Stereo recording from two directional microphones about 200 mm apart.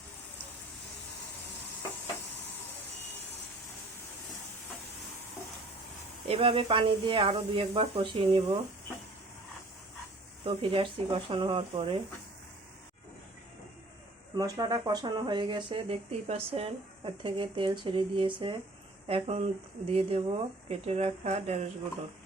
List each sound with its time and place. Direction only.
6.2 s speech: 30° right (ahead or behind)
10.4 s speech: 30° right (ahead or behind)
14.3 s speech: 20° right (ahead or behind); by 21.7 s 35° right (ahead or behind)